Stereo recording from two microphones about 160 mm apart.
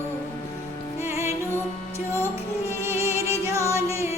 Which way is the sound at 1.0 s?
20° right (ahead or behind).